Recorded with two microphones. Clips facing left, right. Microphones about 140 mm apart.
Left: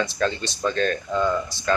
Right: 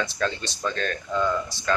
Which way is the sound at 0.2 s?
5° left (ahead or behind).